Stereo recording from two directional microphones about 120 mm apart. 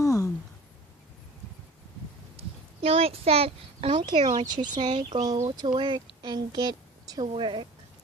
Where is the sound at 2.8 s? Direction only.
55° right (ahead or behind).